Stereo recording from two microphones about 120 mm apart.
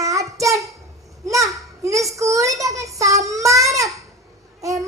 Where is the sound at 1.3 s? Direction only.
25° right (ahead or behind).